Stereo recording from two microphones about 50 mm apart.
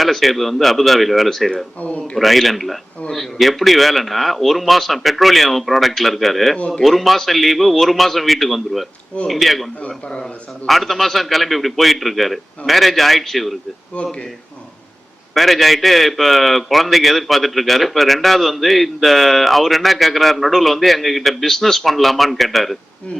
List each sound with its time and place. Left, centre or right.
0.0 s a man's voice: centre
1.8 s a man's voice: left
2.1 s a man's voice: centre
9.8 s a man's voice: left
10.7 s a man's voice: centre
13.9 s a man's voice: left
15.4 s a man's voice: centre